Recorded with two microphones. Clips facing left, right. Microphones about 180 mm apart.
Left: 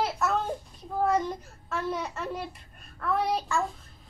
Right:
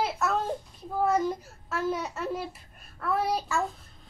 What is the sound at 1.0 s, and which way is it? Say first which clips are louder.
Speech: right 1 dB; 5° right (ahead or behind).